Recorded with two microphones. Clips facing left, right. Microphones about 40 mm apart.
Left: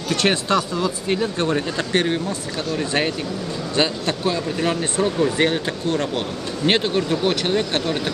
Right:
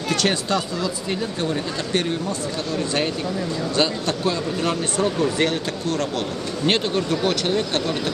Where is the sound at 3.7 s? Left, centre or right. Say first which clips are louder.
Left 2 dB; centre.